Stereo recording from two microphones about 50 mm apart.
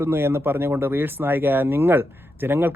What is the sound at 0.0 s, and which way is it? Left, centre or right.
Speech, right.